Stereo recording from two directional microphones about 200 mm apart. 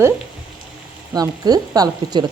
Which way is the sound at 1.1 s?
20° right (ahead or behind).